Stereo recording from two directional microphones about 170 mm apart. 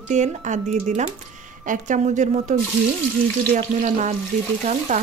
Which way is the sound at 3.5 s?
45° right (ahead or behind).